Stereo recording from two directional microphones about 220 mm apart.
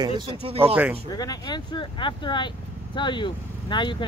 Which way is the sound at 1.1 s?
20° left (ahead or behind).